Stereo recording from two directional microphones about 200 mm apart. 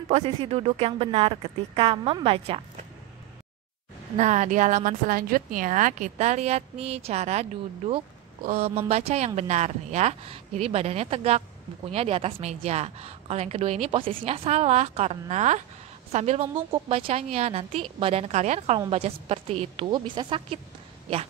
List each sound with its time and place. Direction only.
0.1 s speech: 30° right (ahead or behind)
4.2 s a woman's voice: 35° right (ahead or behind)